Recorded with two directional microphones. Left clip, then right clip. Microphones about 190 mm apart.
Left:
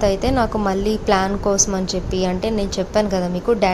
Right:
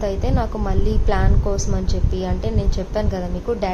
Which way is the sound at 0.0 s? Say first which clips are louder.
Left 6 dB; 20° left (ahead or behind).